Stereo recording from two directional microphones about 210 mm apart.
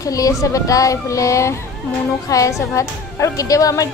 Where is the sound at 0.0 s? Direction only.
15° left (ahead or behind).